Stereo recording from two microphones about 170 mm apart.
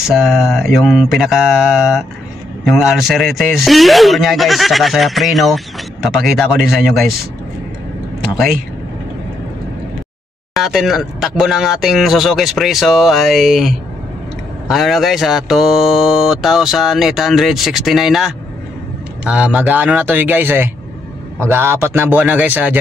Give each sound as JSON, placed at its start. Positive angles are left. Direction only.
{"t": 0.1, "sound": "speech", "side_deg": -5}
{"t": 10.5, "sound": "a man's voice", "side_deg": 0}